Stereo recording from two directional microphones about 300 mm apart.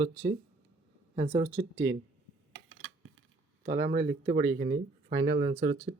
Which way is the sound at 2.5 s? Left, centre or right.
Right.